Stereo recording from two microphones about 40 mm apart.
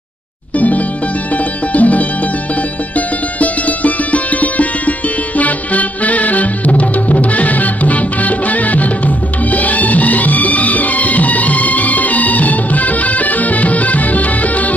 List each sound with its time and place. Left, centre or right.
0.6 s music: left
3.3 s music: left